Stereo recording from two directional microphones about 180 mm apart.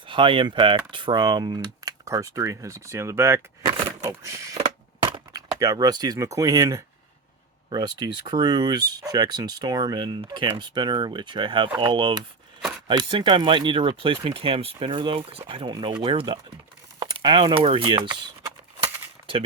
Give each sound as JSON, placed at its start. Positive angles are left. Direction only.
{"t": 0.0, "sound": "speech", "side_deg": -30}